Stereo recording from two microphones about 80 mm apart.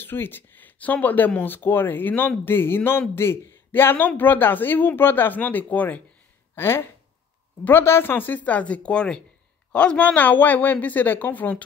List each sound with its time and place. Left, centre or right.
0.0 s speech: left
6.5 s speech: left